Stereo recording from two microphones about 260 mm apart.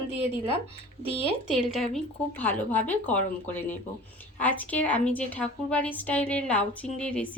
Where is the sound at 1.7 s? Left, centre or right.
Centre.